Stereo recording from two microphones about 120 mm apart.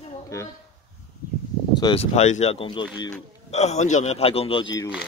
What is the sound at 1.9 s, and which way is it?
A man's voice, 60° left (ahead or behind).